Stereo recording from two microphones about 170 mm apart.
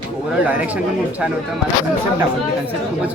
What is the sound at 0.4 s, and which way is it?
Speech, 10° right (ahead or behind).